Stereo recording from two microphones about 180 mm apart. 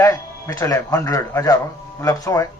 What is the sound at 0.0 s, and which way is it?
A man's voice, 15° left (ahead or behind).